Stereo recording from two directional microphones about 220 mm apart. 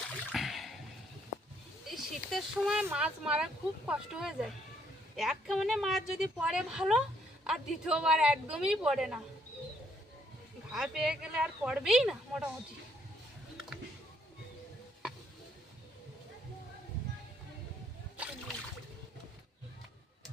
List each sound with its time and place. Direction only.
0.1 s a sound: 5° left (ahead or behind)
1.9 s speech: centre (ahead or behind)
10.7 s speech: centre (ahead or behind)